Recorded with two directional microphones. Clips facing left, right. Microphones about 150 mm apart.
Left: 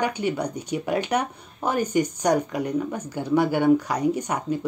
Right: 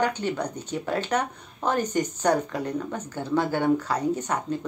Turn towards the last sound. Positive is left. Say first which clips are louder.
# left 1 dB
turn(degrees=10)  # may be behind; listen again after turning